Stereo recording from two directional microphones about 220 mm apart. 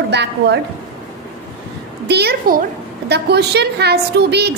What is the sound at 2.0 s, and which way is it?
A woman's voice, 50° right (ahead or behind).